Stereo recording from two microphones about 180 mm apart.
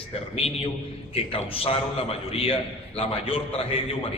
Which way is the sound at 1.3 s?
30° left (ahead or behind).